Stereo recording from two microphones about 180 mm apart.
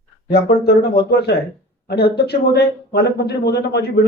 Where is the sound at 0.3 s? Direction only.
65° left (ahead or behind).